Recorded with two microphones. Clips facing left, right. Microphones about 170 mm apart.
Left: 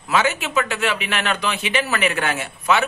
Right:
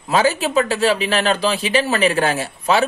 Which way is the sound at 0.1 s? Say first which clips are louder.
Right 4 dB; 35° right (ahead or behind).